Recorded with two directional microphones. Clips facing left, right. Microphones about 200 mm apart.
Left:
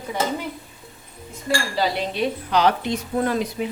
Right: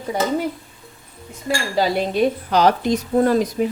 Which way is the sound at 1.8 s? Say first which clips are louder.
Right 8 dB; 45° right (ahead or behind).